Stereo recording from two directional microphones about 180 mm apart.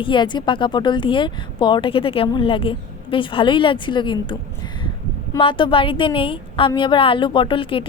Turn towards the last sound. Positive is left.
turn(degrees=30)  # may be behind; listen again after turning